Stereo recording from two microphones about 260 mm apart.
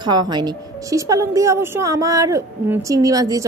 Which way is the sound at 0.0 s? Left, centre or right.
Centre.